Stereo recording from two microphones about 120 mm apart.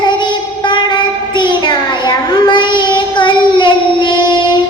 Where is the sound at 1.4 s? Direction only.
40° left (ahead or behind).